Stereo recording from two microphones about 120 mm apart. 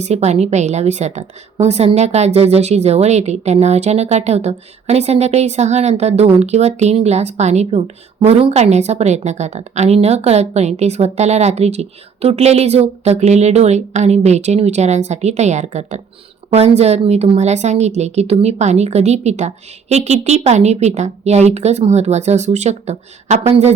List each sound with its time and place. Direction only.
0.0 s a woman's voice: 70° right (ahead or behind)
16.5 s a woman's voice: 65° right (ahead or behind)